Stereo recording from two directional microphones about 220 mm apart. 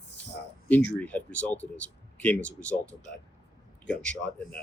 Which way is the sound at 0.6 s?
5° left (ahead or behind).